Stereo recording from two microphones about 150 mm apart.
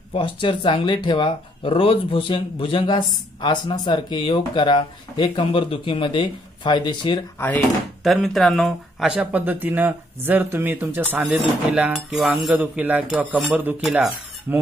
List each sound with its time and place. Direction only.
0.1 s speech: 35° left (ahead or behind)
7.3 s speech: 10° left (ahead or behind)
8.0 s speech: centre (ahead or behind)